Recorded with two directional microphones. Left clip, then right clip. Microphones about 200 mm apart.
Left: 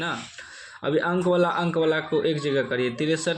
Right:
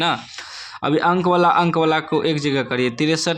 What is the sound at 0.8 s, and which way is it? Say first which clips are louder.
A man's voice: right 6 dB; 40° right (ahead or behind).